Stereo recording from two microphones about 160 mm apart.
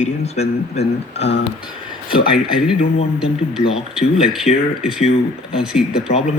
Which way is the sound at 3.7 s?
5° right (ahead or behind).